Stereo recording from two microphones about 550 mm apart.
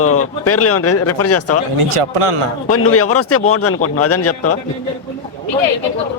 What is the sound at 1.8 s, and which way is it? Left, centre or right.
Speech, right.